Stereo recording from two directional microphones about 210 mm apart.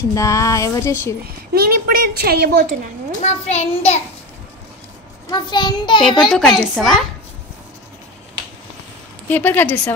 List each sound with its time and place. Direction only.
0.1 s speech: 15° left (ahead or behind)
1.5 s a woman's voice: 45° right (ahead or behind)
3.2 s a child's voice: 30° left (ahead or behind)
5.3 s a child's voice: 20° left (ahead or behind)
6.6 s a woman's voice: centre (ahead or behind)
9.3 s speech: 10° left (ahead or behind)